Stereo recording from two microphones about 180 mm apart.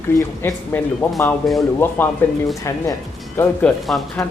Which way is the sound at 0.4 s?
15° left (ahead or behind).